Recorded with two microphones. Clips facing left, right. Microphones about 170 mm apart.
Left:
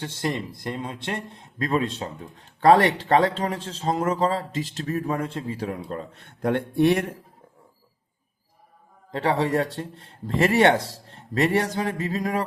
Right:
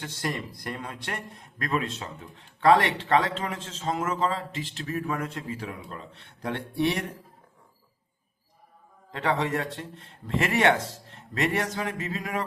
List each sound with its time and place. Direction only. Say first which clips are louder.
0.0 s a man's voice: left 4 dB; 25° left (ahead or behind); by 7.0 s 50° left (ahead or behind)
9.1 s a man's voice: left 5 dB; 35° left (ahead or behind)